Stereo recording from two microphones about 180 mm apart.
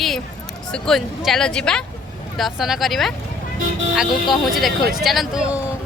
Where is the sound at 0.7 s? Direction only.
Centre (ahead or behind).